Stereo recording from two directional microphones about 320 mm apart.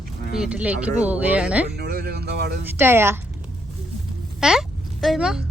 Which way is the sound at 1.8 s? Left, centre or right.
Right.